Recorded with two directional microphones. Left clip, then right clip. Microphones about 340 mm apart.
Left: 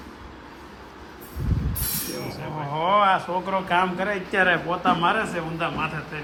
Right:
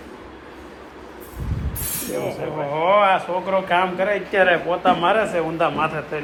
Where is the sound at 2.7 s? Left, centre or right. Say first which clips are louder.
Right 3 dB; centre.